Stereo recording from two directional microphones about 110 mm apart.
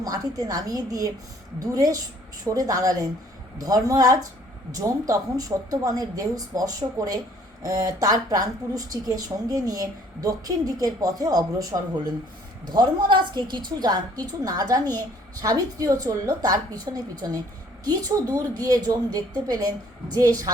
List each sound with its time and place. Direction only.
0.0 s a woman's voice: 35° right (ahead or behind)
12.6 s a woman's voice: 45° right (ahead or behind)